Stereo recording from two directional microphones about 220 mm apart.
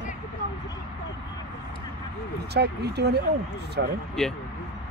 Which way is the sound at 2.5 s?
50° right (ahead or behind).